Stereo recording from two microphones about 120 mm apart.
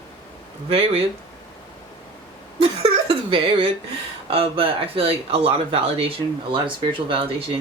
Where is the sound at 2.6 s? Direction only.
50° right (ahead or behind).